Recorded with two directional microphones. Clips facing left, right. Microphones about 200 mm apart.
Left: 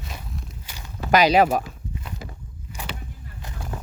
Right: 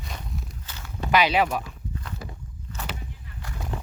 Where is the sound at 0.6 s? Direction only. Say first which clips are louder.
Left 1 dB; 15° left (ahead or behind).